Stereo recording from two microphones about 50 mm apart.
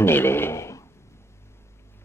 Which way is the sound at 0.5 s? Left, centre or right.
Left.